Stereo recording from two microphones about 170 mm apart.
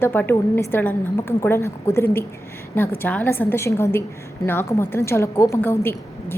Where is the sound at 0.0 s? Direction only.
15° left (ahead or behind).